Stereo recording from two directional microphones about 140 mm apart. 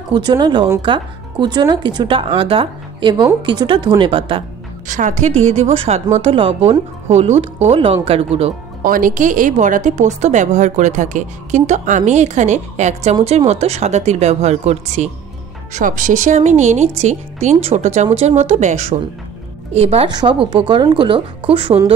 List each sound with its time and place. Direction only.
0.1 s speech: 35° right (ahead or behind)
4.8 s speech: 65° right (ahead or behind); by 8.5 s 45° right (ahead or behind)
8.8 s a woman's voice: 80° right; by 15.0 s 50° right (ahead or behind)
15.7 s a woman's voice: 70° right (ahead or behind); by 20.1 s 50° right (ahead or behind)
20.1 s speech: 35° right (ahead or behind)